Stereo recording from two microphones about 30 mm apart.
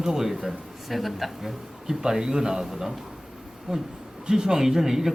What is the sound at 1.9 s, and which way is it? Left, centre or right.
A man's voice, right.